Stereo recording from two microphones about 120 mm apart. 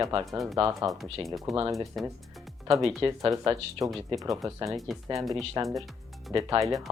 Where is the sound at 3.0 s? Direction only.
30° right (ahead or behind).